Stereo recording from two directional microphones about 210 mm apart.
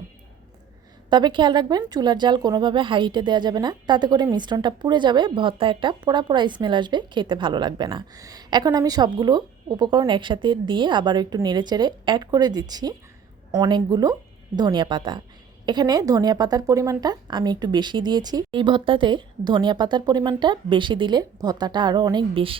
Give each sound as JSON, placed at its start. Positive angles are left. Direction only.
{"t": 1.1, "sound": "speech", "side_deg": -20}